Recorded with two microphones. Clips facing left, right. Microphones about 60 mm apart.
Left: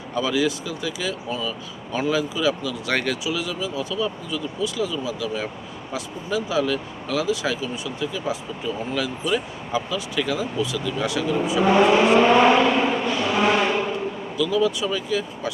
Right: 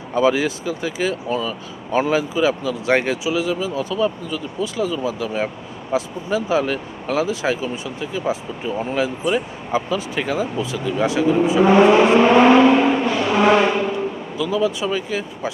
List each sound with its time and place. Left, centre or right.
0.1 s speech: right
12.2 s vehicle: centre
14.3 s speech: right